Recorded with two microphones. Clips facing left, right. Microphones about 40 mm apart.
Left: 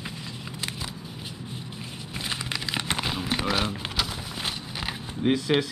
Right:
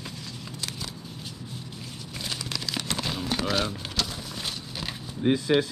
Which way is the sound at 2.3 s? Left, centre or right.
Left.